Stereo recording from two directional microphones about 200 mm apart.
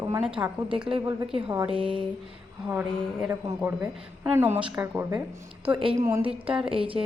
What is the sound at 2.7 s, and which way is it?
A man's voice, 10° right (ahead or behind).